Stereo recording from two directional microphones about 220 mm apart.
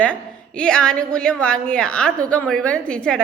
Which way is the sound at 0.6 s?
5° left (ahead or behind).